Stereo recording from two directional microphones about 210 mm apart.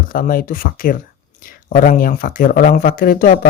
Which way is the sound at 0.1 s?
40° left (ahead or behind).